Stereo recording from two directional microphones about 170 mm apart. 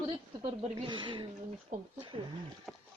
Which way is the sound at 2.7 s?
Centre (ahead or behind).